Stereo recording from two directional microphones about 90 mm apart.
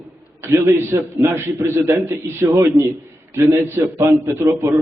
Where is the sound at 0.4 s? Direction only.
30° right (ahead or behind).